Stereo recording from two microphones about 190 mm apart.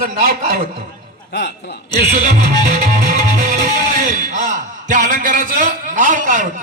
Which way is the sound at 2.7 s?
40° right (ahead or behind).